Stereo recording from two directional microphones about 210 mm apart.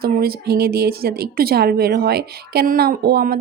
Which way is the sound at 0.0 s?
45° right (ahead or behind).